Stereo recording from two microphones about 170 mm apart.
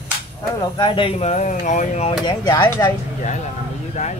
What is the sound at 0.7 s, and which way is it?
Speech, 30° left (ahead or behind).